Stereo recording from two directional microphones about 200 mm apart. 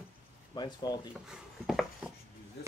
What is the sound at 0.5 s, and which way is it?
Speech, 20° left (ahead or behind).